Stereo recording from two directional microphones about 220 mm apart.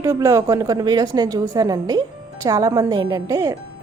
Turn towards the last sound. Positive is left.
turn(degrees=-15)  # may be behind; listen again after turning